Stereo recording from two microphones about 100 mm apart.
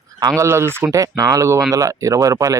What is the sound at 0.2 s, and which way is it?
Speech, 40° right (ahead or behind).